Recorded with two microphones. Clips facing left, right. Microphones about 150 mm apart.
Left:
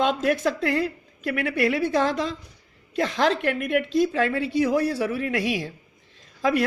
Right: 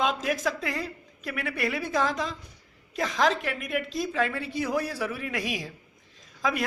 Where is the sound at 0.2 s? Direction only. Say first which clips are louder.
Left 6 dB; 60° left (ahead or behind).